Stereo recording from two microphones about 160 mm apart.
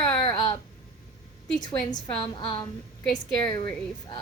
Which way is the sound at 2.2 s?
30° left (ahead or behind).